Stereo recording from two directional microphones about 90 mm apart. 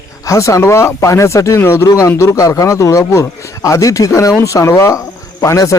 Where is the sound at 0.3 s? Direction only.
35° left (ahead or behind).